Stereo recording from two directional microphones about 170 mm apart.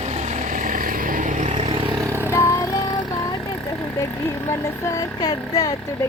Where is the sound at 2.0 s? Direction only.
15° right (ahead or behind).